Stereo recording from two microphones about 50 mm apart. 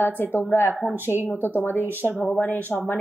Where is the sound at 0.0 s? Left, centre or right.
Left.